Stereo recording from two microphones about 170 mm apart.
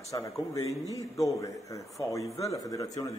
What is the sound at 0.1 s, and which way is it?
A man's voice, 20° left (ahead or behind).